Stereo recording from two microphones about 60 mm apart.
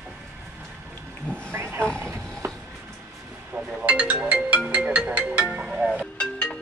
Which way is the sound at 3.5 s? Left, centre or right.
Centre.